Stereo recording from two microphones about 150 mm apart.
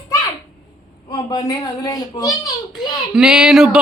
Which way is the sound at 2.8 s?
5° right (ahead or behind).